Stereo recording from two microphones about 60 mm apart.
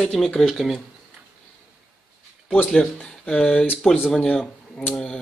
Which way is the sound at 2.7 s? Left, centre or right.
Centre.